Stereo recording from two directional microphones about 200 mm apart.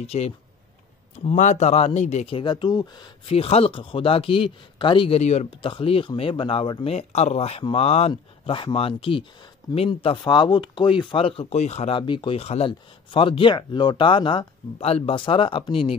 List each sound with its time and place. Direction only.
0.0 s speech: 30° left (ahead or behind)